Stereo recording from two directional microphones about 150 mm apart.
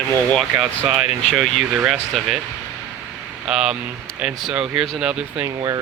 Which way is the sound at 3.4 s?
5° right (ahead or behind).